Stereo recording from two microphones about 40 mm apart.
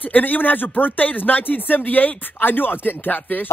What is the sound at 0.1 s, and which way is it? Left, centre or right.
Speech, left.